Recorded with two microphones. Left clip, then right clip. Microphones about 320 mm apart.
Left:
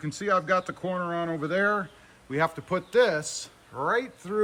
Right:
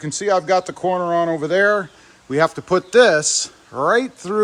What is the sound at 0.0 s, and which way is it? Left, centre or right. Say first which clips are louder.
Speech: right 8 dB; centre.